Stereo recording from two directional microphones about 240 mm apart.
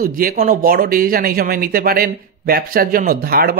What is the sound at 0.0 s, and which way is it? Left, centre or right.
Speech, right.